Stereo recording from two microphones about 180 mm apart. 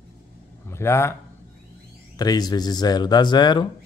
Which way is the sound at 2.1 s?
20° left (ahead or behind).